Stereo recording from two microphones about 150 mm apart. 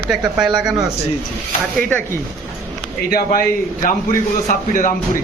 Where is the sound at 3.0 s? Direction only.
85° left.